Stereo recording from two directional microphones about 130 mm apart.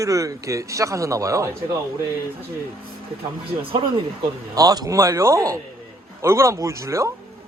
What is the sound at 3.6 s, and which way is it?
Speech, 45° right (ahead or behind).